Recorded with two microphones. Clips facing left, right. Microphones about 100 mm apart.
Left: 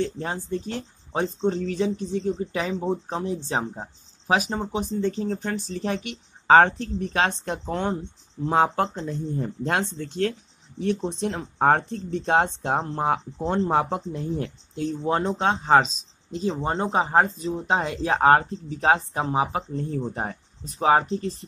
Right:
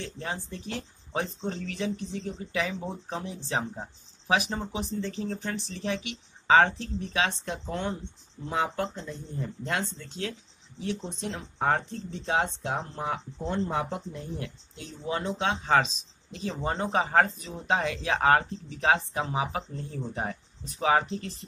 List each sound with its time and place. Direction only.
0.0 s speech: 35° left (ahead or behind)
15.6 s speech: 30° left (ahead or behind)